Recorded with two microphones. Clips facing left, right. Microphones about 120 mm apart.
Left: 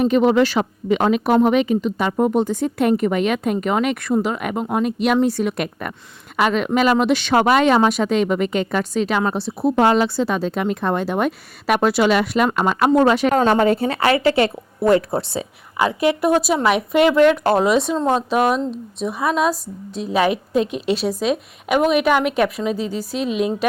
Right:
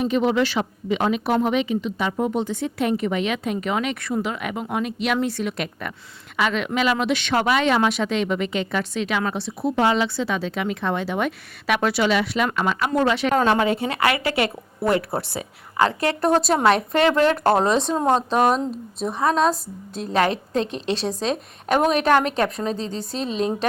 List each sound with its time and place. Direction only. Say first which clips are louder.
0.0 s a woman's voice: left 5 dB; 50° left (ahead or behind); by 15.4 s 25° left (ahead or behind)
15.8 s a woman's voice: left 2 dB; 15° left (ahead or behind)
20.9 s speech: left 4 dB; 25° right (ahead or behind)
21.9 s a woman's voice: left 2 dB; 5° left (ahead or behind)